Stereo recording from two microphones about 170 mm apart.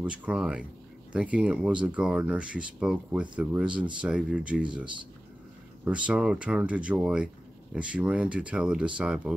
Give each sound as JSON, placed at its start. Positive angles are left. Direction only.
{"t": 0.0, "sound": "speech", "side_deg": -10}
{"t": 5.9, "sound": "speech", "side_deg": -5}